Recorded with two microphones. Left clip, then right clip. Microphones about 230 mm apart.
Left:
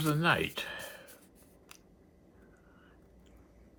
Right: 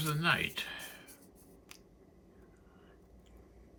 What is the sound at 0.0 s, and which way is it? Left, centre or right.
Speech, centre.